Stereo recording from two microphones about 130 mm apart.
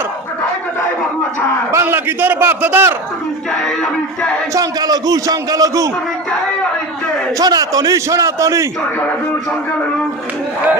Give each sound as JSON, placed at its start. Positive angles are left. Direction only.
{"t": 1.7, "sound": "a man's voice", "side_deg": -15}
{"t": 4.5, "sound": "a man's voice", "side_deg": -30}
{"t": 7.3, "sound": "a man's voice", "side_deg": -30}